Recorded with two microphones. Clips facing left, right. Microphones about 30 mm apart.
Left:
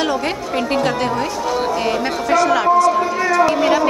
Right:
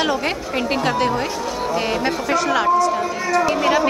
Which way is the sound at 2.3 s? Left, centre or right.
Centre.